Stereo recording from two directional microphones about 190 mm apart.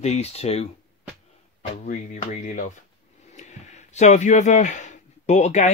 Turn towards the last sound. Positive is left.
turn(degrees=35)  # may be behind; listen again after turning